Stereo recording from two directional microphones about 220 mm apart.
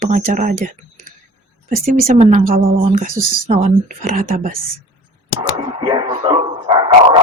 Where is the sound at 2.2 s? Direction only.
30° right (ahead or behind).